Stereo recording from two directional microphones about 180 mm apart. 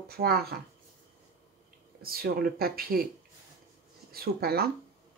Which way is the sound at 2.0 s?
55° right (ahead or behind).